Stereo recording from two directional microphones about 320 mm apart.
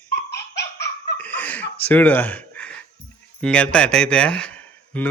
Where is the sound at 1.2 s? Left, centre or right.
Centre.